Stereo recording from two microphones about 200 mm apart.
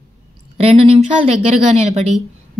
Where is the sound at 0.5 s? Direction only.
30° right (ahead or behind).